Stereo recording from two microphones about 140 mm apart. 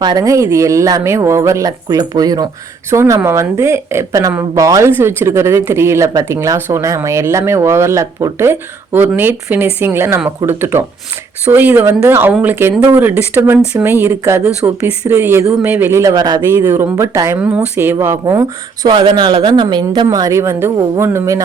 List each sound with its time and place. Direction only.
0.0 s a woman's voice: 25° right (ahead or behind)
16.5 s a woman's voice: 15° right (ahead or behind)
18.9 s a woman's voice: 35° right (ahead or behind)